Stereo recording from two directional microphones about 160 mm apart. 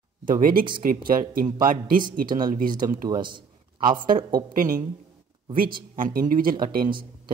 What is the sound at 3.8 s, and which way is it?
A man's voice, 60° right (ahead or behind).